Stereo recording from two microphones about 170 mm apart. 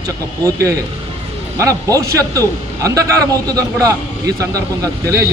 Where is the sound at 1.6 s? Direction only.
20° right (ahead or behind).